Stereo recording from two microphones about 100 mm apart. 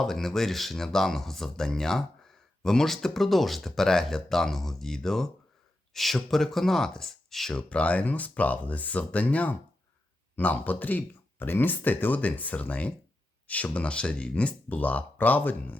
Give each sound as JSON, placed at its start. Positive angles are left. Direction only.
{"t": 0.0, "sound": "speech", "side_deg": 5}